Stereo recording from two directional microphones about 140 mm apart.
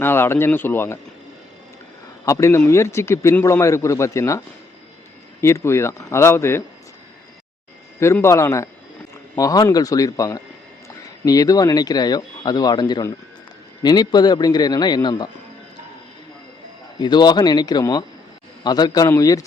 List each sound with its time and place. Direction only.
0.0 s speech: 15° left (ahead or behind)
2.2 s a man's voice: 20° left (ahead or behind)
7.9 s a man's voice: 20° left (ahead or behind)
17.0 s a man's voice: 30° left (ahead or behind)